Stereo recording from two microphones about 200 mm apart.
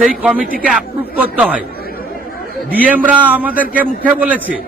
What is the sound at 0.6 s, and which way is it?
Speech, 5° right (ahead or behind).